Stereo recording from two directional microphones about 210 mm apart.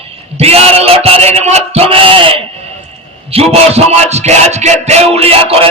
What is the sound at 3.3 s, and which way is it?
Music, 30° right (ahead or behind).